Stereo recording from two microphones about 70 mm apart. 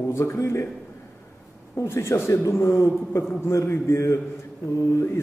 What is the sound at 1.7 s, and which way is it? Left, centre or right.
Speech, left.